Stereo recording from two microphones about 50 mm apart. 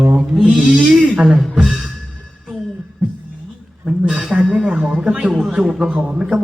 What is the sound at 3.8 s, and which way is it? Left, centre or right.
A man's voice, centre.